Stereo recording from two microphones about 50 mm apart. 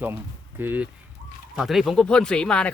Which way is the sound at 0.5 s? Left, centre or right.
Right.